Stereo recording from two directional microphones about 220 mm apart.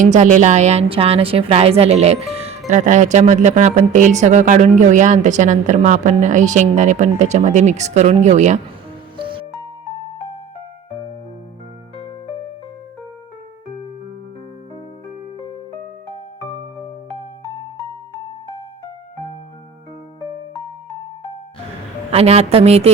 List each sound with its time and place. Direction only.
0.0 s a woman's voice: 35° right (ahead or behind)
9.1 s music: 20° right (ahead or behind)
22.1 s a woman's voice: 30° right (ahead or behind)